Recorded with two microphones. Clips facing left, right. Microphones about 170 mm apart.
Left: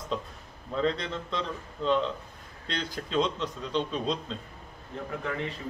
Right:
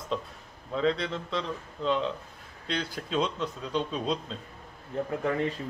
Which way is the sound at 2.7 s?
5° right (ahead or behind).